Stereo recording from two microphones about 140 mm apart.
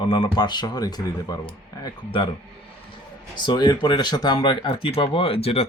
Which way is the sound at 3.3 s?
35° left (ahead or behind).